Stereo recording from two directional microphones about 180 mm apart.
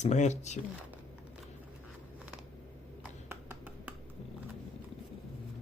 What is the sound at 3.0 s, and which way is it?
Finger snapping, 10° right (ahead or behind).